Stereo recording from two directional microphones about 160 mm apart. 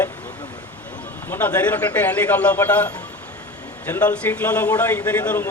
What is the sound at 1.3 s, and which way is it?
A man's voice, 10° left (ahead or behind).